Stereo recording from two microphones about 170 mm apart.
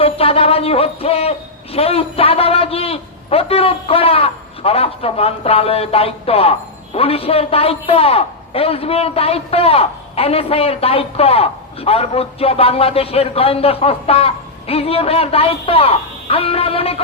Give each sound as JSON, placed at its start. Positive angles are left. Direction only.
{"t": 0.0, "sound": "a man's voice", "side_deg": 35}